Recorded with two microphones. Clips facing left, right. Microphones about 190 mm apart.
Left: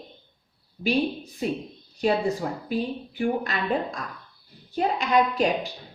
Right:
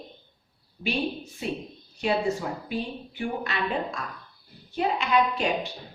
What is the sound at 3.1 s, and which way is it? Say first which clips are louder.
A woman's voice: left 4 dB; 40° left (ahead or behind).